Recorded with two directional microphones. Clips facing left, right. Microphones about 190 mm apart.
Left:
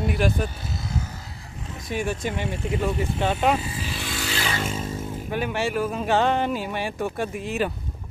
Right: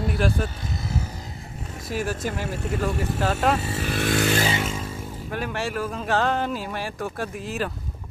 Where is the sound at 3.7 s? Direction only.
55° right (ahead or behind).